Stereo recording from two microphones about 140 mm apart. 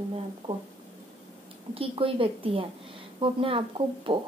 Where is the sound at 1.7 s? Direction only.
40° right (ahead or behind).